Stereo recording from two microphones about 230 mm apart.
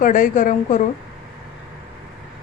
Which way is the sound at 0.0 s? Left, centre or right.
Left.